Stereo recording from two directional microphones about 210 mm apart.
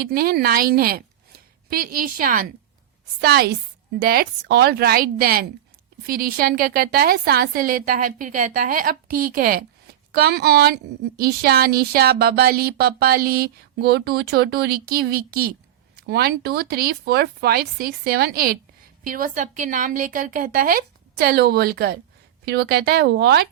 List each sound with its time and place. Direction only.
0.0 s a woman's voice: 45° right (ahead or behind)